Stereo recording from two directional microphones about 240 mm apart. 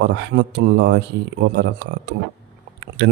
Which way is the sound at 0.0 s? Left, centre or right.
Right.